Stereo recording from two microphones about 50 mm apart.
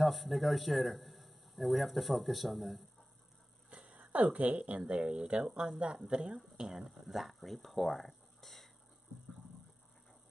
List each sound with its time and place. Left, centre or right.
0.0 s a man's voice: centre
3.7 s a sound: right
4.1 s a woman's voice: right
6.7 s speech: centre